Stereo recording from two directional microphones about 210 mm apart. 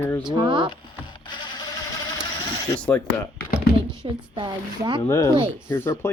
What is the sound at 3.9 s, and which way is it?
Speech, 25° right (ahead or behind).